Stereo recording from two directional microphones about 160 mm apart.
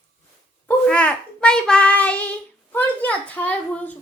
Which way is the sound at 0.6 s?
10° left (ahead or behind).